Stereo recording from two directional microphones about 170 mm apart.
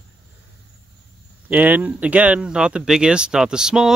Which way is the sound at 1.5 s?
10° right (ahead or behind).